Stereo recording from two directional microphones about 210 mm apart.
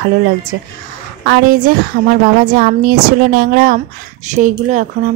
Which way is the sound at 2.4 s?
40° right (ahead or behind).